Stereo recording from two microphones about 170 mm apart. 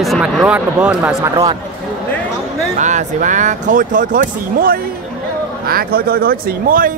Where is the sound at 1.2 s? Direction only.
20° right (ahead or behind).